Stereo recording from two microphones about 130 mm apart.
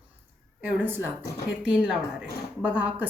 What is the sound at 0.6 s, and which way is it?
A woman's voice, 15° right (ahead or behind).